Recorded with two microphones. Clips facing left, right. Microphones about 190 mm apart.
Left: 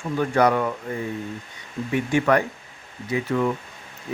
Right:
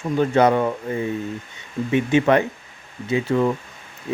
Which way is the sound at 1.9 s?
20° right (ahead or behind).